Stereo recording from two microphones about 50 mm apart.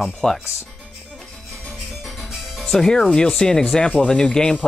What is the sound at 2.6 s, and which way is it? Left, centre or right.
Speech, centre.